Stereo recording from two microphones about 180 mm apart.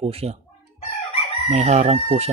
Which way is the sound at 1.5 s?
40° right (ahead or behind).